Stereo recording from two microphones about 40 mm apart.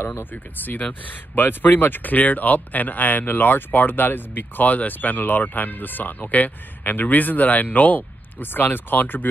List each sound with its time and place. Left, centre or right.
0.0 s speech: left
0.3 s speech: left